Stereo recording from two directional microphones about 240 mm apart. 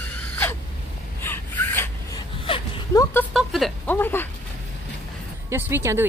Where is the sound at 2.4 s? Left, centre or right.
Left.